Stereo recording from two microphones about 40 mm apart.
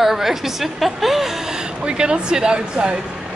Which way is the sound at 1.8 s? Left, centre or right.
Right.